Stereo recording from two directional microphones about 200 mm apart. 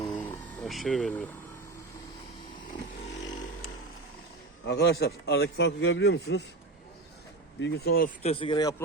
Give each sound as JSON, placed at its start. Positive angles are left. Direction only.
{"t": 0.1, "sound": "vehicle", "side_deg": 10}
{"t": 4.6, "sound": "a man's voice", "side_deg": 55}
{"t": 7.6, "sound": "speech", "side_deg": 50}
{"t": 8.2, "sound": "speech", "side_deg": 30}